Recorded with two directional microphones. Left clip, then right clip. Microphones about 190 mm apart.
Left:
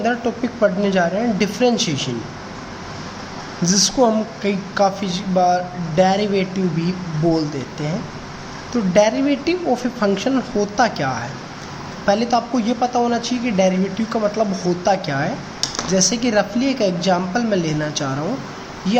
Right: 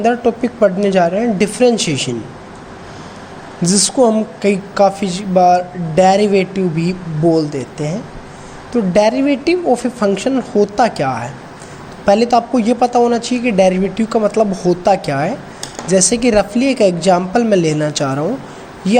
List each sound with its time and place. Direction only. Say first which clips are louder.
0.0 s a woman's voice: right 6 dB; 25° right (ahead or behind)
3.6 s a woman's voice: right 3 dB; 25° right (ahead or behind)